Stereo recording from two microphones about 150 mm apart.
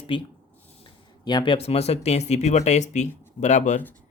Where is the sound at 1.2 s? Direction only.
30° left (ahead or behind).